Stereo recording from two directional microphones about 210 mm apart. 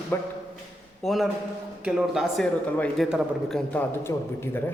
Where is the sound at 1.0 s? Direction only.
Centre (ahead or behind).